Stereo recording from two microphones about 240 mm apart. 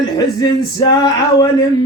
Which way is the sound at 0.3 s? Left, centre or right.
Centre.